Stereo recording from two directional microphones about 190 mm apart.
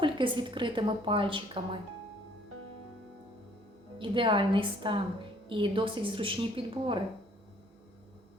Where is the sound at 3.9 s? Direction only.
25° right (ahead or behind).